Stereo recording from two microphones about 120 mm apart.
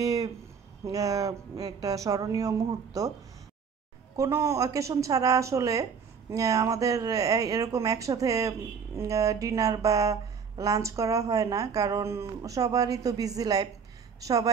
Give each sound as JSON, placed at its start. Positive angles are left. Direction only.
{"t": 0.0, "sound": "a sound", "side_deg": -30}
{"t": 0.8, "sound": "a woman's voice", "side_deg": -30}
{"t": 4.2, "sound": "a woman's voice", "side_deg": -25}